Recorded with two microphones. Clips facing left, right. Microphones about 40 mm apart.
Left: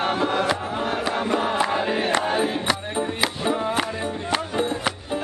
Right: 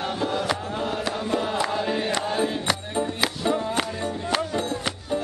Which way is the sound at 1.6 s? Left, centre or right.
Left.